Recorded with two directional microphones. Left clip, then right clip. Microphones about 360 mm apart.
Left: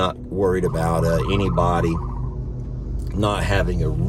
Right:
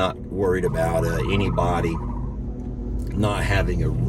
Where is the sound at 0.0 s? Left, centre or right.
Centre.